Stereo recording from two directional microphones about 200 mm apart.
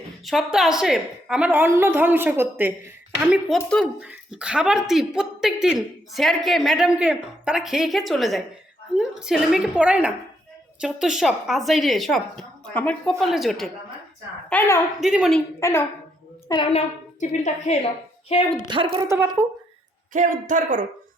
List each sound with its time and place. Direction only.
0.3 s a woman's voice: centre (ahead or behind)
3.3 s speech: centre (ahead or behind)
14.5 s a woman's voice: 10° left (ahead or behind)
15.0 s speech: centre (ahead or behind)
15.6 s a woman's voice: 15° left (ahead or behind)
17.2 s a woman's voice: 35° left (ahead or behind)
18.7 s a woman's voice: 25° right (ahead or behind)
20.1 s speech: 40° right (ahead or behind)